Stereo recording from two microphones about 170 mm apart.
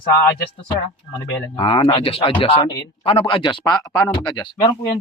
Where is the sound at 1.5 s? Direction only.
30° left (ahead or behind).